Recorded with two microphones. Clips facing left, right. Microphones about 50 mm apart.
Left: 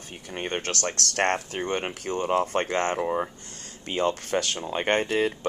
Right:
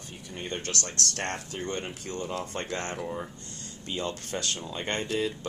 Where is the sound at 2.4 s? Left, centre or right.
Left.